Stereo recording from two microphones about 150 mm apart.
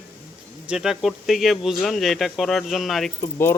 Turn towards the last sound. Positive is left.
turn(degrees=15)  # may be behind; listen again after turning